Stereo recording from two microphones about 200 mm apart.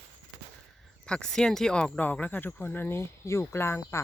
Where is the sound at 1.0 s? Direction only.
5° left (ahead or behind).